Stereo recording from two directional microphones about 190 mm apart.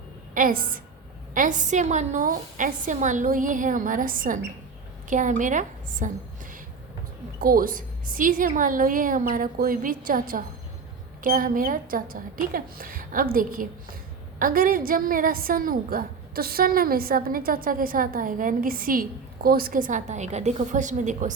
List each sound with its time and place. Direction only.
0.3 s a woman's voice: 45° right (ahead or behind)
7.3 s a woman's voice: 50° right (ahead or behind)